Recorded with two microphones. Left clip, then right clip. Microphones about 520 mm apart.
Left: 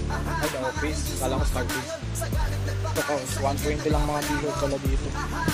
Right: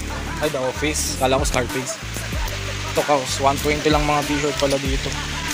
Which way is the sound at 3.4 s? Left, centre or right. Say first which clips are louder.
Right 8 dB; left.